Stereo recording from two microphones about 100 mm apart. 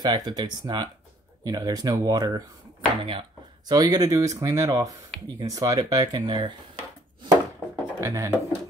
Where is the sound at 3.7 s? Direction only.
40° right (ahead or behind).